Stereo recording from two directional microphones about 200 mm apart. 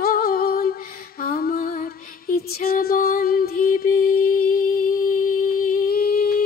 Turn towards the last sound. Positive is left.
turn(degrees=50)  # may be behind; listen again after turning